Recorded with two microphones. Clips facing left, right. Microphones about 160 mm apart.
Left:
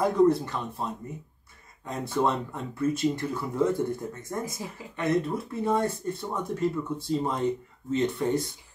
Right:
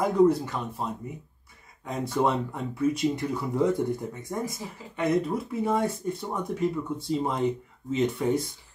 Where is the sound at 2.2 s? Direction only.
10° right (ahead or behind).